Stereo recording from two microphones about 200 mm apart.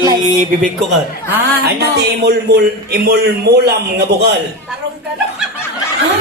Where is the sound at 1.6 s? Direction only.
55° right (ahead or behind).